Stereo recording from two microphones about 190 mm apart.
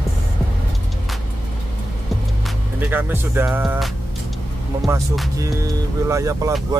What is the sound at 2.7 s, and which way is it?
Speech, 10° right (ahead or behind).